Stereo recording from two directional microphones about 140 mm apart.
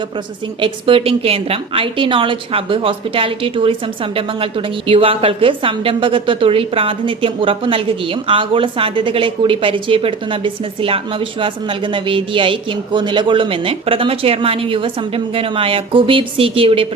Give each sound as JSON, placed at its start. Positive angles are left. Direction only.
{"t": 0.6, "sound": "a woman's voice", "side_deg": -40}